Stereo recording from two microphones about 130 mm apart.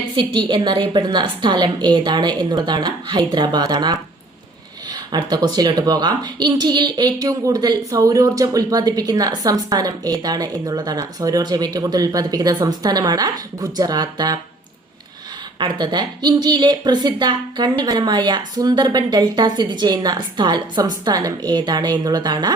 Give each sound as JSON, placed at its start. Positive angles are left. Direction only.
{"t": 0.2, "sound": "a woman's voice", "side_deg": -35}
{"t": 5.1, "sound": "speech", "side_deg": -30}
{"t": 15.5, "sound": "a woman's voice", "side_deg": -35}